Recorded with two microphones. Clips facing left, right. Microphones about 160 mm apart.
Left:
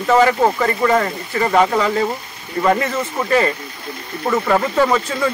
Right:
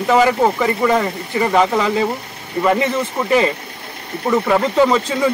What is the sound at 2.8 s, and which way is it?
Speech, 15° right (ahead or behind).